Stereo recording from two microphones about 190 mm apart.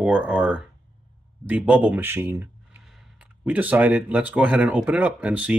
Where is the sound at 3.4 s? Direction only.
5° right (ahead or behind).